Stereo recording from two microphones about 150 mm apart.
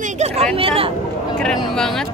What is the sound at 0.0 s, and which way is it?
Speech, 50° right (ahead or behind).